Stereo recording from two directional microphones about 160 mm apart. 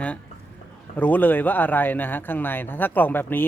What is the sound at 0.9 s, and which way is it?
Speech, 10° left (ahead or behind).